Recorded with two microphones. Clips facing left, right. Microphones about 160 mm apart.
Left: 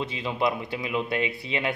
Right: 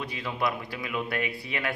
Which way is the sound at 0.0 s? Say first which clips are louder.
Left 4 dB; 20° left (ahead or behind).